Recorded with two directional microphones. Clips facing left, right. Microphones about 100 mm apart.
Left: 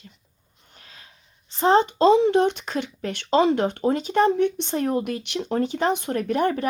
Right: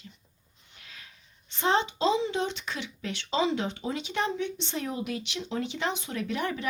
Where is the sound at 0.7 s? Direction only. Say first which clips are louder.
Left 1 dB; 35° left (ahead or behind).